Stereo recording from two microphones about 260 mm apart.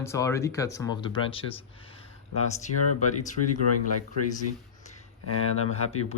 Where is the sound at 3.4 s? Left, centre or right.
Left.